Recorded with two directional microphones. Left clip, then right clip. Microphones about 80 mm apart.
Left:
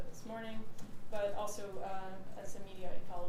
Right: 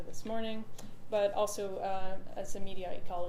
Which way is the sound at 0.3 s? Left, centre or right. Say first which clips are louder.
Right 7 dB; right.